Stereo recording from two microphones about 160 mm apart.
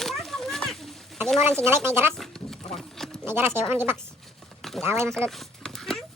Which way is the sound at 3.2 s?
15° right (ahead or behind).